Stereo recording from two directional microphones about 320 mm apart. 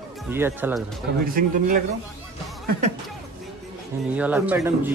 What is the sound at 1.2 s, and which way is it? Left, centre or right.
Speech, right.